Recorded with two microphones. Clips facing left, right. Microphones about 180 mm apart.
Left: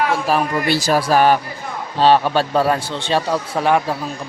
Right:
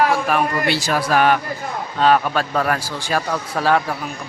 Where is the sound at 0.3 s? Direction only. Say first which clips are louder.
Left 1 dB; 35° left (ahead or behind); by 3.9 s 20° left (ahead or behind).